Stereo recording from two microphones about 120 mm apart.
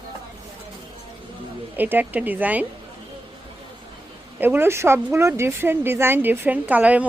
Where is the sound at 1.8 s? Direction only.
15° right (ahead or behind).